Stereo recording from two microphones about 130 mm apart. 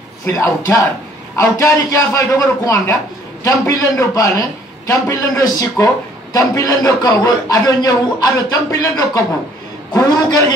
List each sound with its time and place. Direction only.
0.3 s a man's voice: 20° left (ahead or behind)